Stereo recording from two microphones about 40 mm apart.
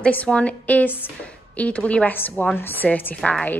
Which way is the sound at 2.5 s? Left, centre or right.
Left.